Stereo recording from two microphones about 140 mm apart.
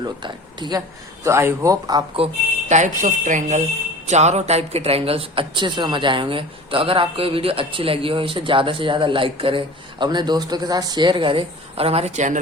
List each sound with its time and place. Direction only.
0.0 s speech: 35° right (ahead or behind)
1.2 s speech: 20° right (ahead or behind)
2.1 s speech: 50° right (ahead or behind)